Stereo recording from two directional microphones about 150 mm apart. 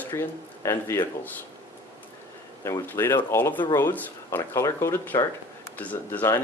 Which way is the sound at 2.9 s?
15° left (ahead or behind).